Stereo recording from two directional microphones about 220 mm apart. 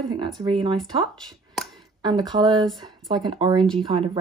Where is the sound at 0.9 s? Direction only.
Centre (ahead or behind).